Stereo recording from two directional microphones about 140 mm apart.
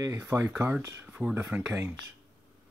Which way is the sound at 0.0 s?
25° right (ahead or behind).